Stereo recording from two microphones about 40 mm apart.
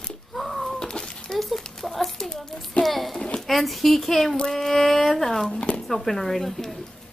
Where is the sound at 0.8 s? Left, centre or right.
Centre.